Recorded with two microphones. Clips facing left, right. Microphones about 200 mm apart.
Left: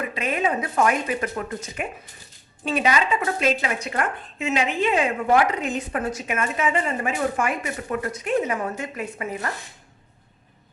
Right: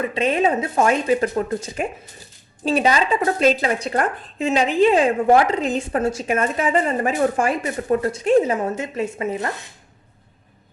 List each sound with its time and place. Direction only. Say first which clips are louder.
0.0 s speech: right 6 dB; 30° right (ahead or behind)